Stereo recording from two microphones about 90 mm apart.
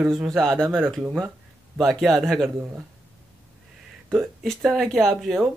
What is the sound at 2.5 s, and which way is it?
Speech, 30° right (ahead or behind).